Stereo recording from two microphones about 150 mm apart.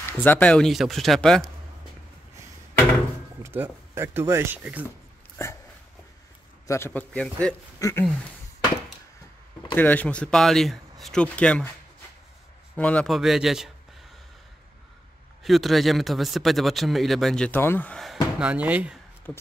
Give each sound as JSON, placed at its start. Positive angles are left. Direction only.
{"t": 0.2, "sound": "a man's voice", "side_deg": 10}
{"t": 3.4, "sound": "speech", "side_deg": -15}
{"t": 5.4, "sound": "a sound", "side_deg": 15}
{"t": 6.7, "sound": "speech", "side_deg": 15}
{"t": 7.8, "sound": "speech", "side_deg": 20}
{"t": 9.8, "sound": "speech", "side_deg": 10}
{"t": 12.7, "sound": "a man's voice", "side_deg": 10}
{"t": 15.4, "sound": "a man's voice", "side_deg": 0}
{"t": 18.0, "sound": "speech", "side_deg": -5}
{"t": 19.3, "sound": "speech", "side_deg": 10}